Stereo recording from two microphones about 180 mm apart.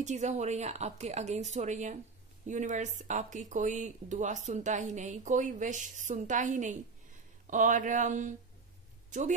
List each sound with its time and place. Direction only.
0.0 s a woman's voice: 40° right (ahead or behind)